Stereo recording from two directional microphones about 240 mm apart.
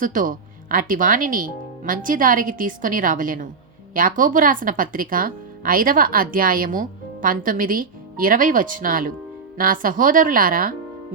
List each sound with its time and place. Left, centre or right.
0.0 s speech: right